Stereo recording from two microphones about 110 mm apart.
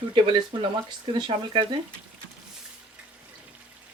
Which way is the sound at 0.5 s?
50° right (ahead or behind).